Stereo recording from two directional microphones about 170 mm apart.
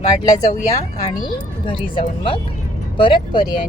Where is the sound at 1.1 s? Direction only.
25° left (ahead or behind).